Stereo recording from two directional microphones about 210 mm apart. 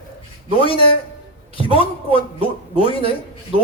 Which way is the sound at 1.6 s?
25° left (ahead or behind).